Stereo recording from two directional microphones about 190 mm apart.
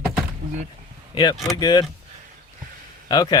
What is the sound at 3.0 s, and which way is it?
Speech, 20° left (ahead or behind).